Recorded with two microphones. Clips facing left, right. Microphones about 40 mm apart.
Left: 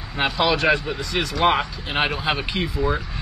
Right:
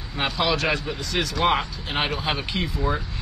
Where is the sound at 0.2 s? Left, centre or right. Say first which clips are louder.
Left 3 dB; centre.